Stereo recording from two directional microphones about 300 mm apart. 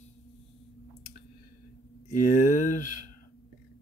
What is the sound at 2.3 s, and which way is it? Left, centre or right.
Speech, left.